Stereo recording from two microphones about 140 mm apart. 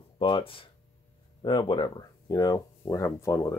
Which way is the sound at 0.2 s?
40° left (ahead or behind).